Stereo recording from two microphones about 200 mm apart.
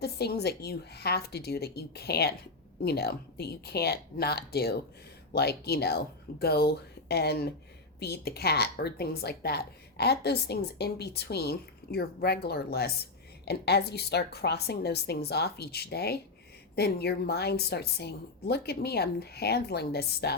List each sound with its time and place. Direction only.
0.0 s a woman's voice: 55° left (ahead or behind)